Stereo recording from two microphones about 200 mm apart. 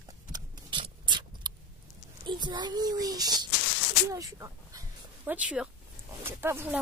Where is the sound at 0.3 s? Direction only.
25° right (ahead or behind).